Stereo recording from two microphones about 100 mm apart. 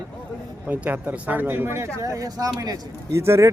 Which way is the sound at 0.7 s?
15° right (ahead or behind).